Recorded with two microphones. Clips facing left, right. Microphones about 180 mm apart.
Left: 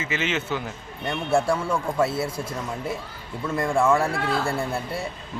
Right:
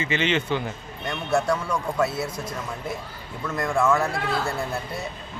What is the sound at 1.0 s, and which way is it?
A man's voice, 25° left (ahead or behind).